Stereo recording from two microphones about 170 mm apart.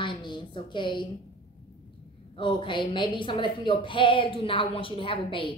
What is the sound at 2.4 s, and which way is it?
A woman's voice, 30° left (ahead or behind).